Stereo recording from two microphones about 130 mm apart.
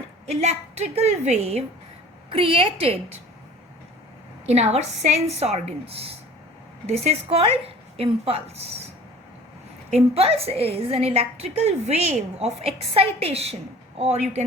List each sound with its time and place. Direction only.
0.3 s a woman's voice: 55° right (ahead or behind)
2.3 s a woman's voice: 45° right (ahead or behind)
4.4 s a woman's voice: 55° right (ahead or behind)
9.9 s a woman's voice: 50° right (ahead or behind)